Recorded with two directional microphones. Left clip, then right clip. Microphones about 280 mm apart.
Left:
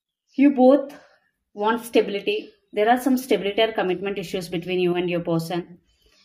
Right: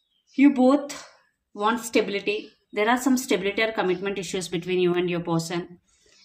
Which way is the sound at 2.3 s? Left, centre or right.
Centre.